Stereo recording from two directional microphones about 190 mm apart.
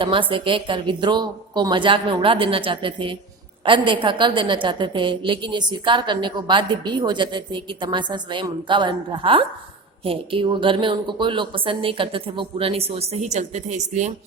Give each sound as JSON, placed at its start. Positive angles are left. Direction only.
{"t": 0.0, "sound": "a woman's voice", "side_deg": -25}